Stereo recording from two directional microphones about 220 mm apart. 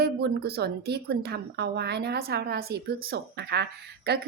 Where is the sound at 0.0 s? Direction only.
45° right (ahead or behind).